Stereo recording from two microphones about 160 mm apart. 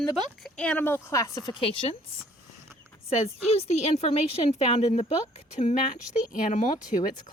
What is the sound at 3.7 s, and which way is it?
Speech, 40° left (ahead or behind).